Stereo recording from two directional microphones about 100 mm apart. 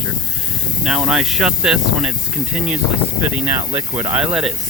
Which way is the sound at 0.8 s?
5° right (ahead or behind).